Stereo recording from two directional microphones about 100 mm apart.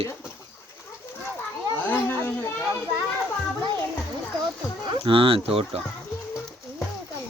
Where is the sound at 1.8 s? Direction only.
20° left (ahead or behind).